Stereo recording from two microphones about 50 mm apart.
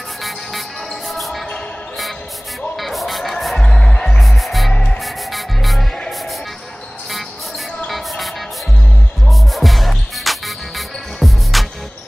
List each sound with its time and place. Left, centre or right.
0.2 s music: centre
2.7 s music: centre
3.6 s music: centre
4.2 s music: centre
7.9 s music: centre